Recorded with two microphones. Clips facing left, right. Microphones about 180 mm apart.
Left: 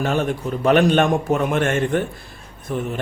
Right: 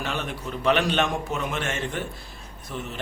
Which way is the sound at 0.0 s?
45° left (ahead or behind).